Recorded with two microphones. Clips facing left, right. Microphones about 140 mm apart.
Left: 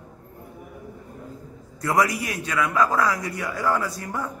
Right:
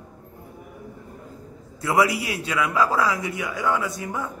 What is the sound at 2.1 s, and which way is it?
Speech, 30° right (ahead or behind).